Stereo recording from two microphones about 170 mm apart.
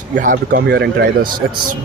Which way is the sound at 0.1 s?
50° right (ahead or behind).